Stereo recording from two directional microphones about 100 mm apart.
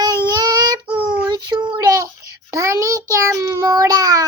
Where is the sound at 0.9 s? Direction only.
15° right (ahead or behind).